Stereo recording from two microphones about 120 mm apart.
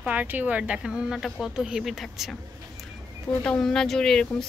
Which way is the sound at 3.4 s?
5° left (ahead or behind).